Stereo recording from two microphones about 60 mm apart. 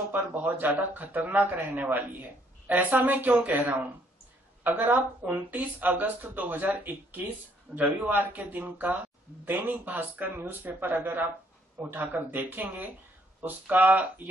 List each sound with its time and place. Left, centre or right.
0.1 s a woman's voice: right